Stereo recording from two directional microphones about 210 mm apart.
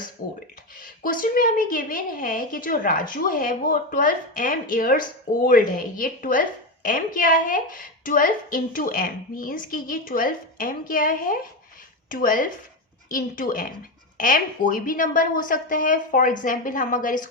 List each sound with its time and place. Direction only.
0.0 s speech: 40° left (ahead or behind)